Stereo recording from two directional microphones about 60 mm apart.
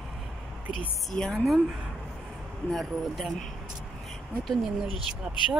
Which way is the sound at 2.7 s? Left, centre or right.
Centre.